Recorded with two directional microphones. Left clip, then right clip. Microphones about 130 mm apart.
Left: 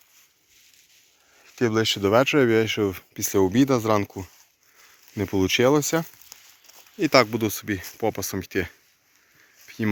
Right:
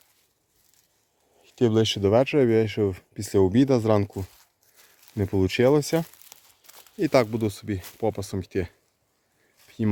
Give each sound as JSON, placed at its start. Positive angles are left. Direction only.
{"t": 1.5, "sound": "speech", "side_deg": -30}
{"t": 2.0, "sound": "speech", "side_deg": -10}
{"t": 3.2, "sound": "speech", "side_deg": -20}
{"t": 5.1, "sound": "speech", "side_deg": -5}
{"t": 7.0, "sound": "speech", "side_deg": -5}
{"t": 9.6, "sound": "dog", "side_deg": -5}